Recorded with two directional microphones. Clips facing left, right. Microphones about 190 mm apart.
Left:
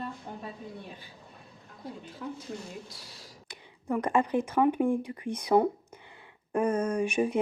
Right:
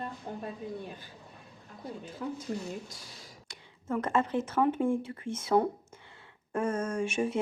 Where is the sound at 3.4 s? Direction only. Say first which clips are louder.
Left 3 dB; 15° left (ahead or behind).